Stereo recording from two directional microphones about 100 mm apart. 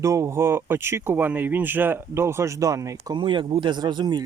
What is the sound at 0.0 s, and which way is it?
Speech, 30° right (ahead or behind).